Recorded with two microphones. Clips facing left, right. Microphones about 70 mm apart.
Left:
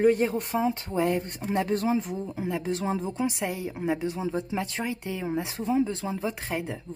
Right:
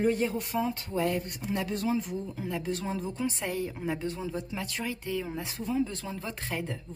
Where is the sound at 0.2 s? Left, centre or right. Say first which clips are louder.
Left 4 dB; left.